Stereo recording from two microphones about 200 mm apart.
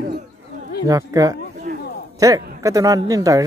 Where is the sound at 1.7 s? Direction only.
50° right (ahead or behind).